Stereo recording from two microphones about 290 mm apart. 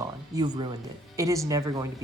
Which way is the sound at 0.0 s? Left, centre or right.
Centre.